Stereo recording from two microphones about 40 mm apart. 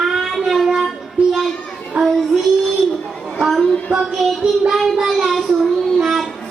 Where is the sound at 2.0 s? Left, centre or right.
Right.